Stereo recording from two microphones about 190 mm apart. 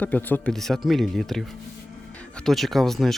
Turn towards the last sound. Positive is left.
turn(degrees=0)  # may be behind; listen again after turning